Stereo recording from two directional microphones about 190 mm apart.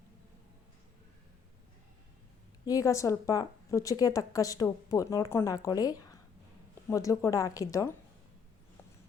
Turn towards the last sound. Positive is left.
turn(degrees=20)  # may be behind; listen again after turning